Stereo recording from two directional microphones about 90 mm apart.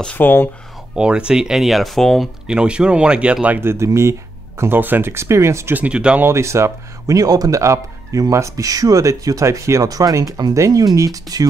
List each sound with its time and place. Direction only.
0.0 s speech: 20° left (ahead or behind)
0.9 s speech: 10° right (ahead or behind)
2.4 s speech: 10° right (ahead or behind); by 5.8 s 30° right (ahead or behind)
5.8 s speech: 10° right (ahead or behind)
6.2 s speech: 30° right (ahead or behind)